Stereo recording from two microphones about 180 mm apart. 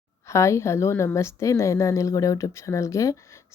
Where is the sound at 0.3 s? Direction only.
15° left (ahead or behind).